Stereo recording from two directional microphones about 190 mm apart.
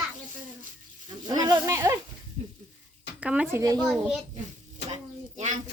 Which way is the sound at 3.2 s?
5° right (ahead or behind).